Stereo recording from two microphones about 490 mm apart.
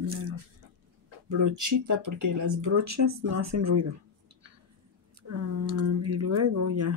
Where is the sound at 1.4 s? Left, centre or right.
Right.